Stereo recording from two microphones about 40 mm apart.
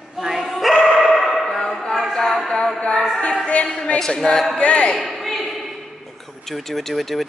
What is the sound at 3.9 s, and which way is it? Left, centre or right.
A capella, centre.